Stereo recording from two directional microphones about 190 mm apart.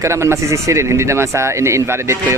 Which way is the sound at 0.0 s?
15° right (ahead or behind).